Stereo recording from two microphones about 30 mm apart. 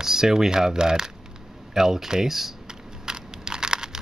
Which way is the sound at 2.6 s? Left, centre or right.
Right.